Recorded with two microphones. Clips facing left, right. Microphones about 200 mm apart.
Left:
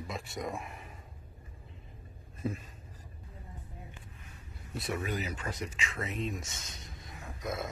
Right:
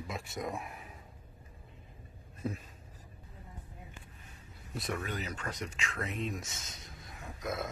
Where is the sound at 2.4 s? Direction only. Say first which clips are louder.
Left 2 dB; centre (ahead or behind).